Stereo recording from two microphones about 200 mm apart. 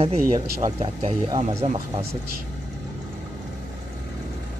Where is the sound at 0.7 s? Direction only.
30° right (ahead or behind).